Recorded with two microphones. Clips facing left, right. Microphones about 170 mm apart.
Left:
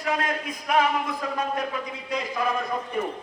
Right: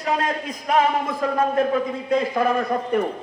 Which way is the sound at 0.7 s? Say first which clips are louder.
Right 3 dB; 45° right (ahead or behind).